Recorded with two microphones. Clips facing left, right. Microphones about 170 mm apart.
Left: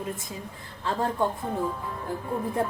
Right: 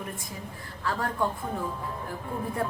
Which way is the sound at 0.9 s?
20° left (ahead or behind).